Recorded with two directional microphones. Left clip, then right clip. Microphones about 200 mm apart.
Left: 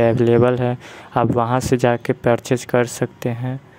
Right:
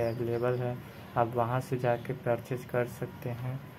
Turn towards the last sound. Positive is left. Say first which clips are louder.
# left 15 dB
turn(degrees=45)  # may be behind; listen again after turning